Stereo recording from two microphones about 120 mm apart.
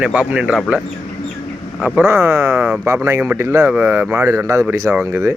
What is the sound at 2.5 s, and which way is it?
Speech, 10° right (ahead or behind).